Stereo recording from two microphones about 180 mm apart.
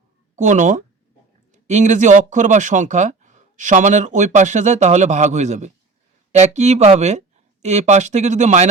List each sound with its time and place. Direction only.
0.3 s speech: 45° right (ahead or behind)